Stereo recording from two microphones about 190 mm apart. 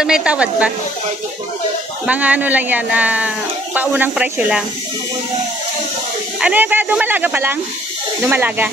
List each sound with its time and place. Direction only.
0.0 s speech: 5° right (ahead or behind)
2.0 s speech: 10° right (ahead or behind)
6.4 s speech: 10° right (ahead or behind)